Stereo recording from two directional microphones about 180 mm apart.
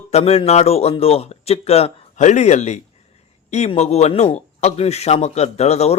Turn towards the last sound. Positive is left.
turn(degrees=35)  # may be behind; listen again after turning